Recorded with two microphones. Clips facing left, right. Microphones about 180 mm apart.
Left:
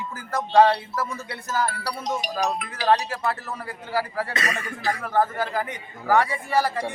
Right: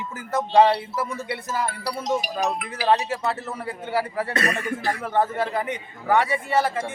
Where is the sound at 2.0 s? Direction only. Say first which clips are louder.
Right 2 dB; centre (ahead or behind).